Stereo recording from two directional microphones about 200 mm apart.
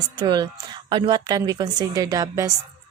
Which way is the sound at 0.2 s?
20° right (ahead or behind).